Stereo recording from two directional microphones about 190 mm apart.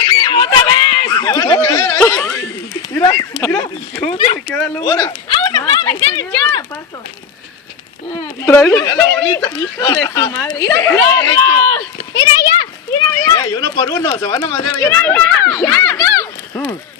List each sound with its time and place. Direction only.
0.0 s a sound: 20° left (ahead or behind)
4.1 s speech: 30° left (ahead or behind)
4.4 s speech: 5° left (ahead or behind)
4.8 s speech: 20° left (ahead or behind)
8.1 s speech: 20° left (ahead or behind)
13.2 s speech: 20° left (ahead or behind)